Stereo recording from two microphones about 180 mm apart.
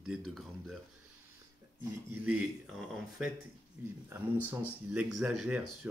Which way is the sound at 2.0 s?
10° right (ahead or behind).